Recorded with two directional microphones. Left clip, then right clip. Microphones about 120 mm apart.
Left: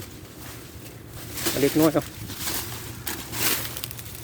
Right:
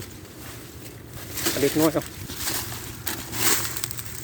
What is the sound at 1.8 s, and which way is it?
Speech, 90° left.